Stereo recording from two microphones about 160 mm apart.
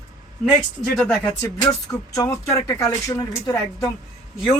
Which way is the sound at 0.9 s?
5° left (ahead or behind).